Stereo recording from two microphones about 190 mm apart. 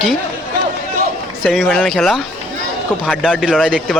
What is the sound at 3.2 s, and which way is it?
Speech, 5° right (ahead or behind).